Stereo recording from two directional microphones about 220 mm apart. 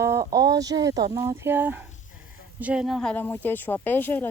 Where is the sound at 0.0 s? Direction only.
15° right (ahead or behind).